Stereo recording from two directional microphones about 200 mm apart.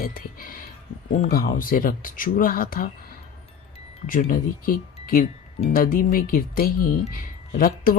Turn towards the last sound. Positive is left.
turn(degrees=45)  # may be behind; listen again after turning